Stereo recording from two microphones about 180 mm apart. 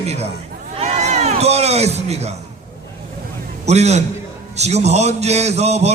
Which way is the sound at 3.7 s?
40° right (ahead or behind).